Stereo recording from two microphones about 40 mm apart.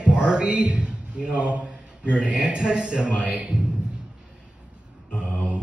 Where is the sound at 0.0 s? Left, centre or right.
Right.